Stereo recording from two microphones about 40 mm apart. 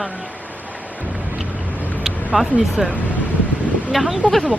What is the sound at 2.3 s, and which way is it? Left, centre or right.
Speech, centre.